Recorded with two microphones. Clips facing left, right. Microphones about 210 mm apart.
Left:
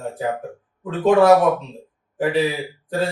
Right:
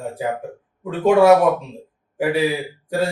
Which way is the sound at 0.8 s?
10° right (ahead or behind).